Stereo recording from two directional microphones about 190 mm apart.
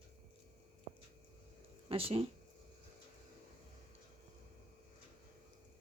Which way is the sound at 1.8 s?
30° right (ahead or behind).